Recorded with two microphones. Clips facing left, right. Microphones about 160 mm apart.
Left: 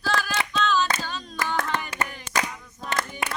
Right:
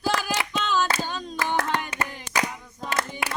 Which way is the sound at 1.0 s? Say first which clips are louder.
Right 2 dB; 20° right (ahead or behind).